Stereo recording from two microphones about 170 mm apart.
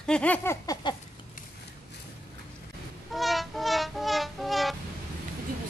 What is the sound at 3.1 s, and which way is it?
Music, centre (ahead or behind).